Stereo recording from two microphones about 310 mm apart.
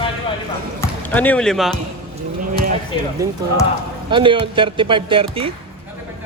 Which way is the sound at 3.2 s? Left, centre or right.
Centre.